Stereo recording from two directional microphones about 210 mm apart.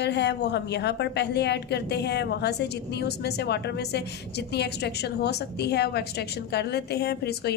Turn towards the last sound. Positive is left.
turn(degrees=50)  # may be behind; listen again after turning